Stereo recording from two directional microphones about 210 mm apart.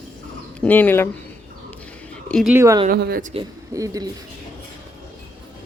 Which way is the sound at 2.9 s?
45° right (ahead or behind).